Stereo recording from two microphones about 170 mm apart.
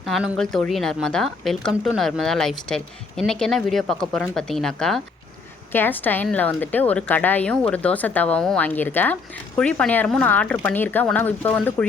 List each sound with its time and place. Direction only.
0.0 s speech: centre (ahead or behind)